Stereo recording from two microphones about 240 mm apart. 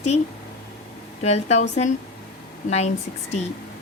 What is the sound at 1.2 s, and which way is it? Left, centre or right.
Speech, left.